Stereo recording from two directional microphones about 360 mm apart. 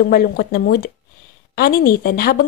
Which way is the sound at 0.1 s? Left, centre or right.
Left.